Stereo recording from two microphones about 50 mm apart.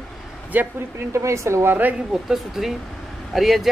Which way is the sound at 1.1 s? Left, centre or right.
Right.